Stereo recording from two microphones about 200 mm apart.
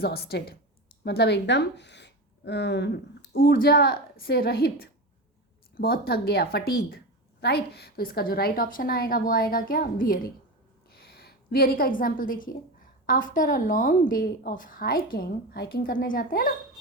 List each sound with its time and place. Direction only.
0.0 s a woman's voice: 50° left (ahead or behind)